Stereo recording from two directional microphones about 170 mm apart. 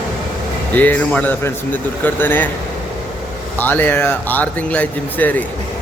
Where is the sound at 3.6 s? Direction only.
10° left (ahead or behind).